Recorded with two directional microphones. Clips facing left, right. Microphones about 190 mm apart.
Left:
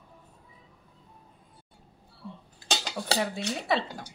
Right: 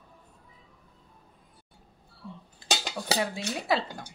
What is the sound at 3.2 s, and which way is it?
Speech, centre (ahead or behind).